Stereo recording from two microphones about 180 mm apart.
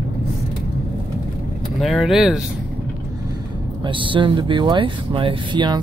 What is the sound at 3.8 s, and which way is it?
Speech, 30° right (ahead or behind).